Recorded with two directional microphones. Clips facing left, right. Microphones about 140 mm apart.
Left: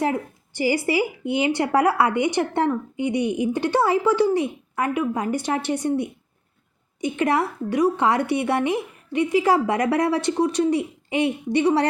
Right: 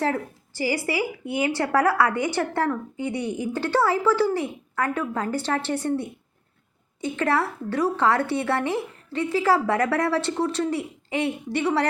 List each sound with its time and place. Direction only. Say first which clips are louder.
0.0 s a woman's voice: left 2 dB; 20° left (ahead or behind)